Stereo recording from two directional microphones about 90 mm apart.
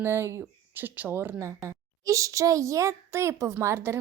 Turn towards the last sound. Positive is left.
turn(degrees=-30)  # may be behind; listen again after turning